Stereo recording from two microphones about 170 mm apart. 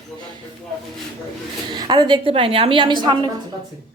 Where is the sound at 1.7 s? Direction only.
25° right (ahead or behind).